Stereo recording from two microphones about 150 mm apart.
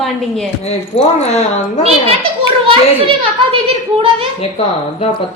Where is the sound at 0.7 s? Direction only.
45° left (ahead or behind).